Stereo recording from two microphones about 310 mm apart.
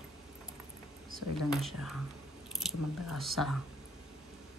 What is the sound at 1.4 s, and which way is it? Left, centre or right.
Speech, centre.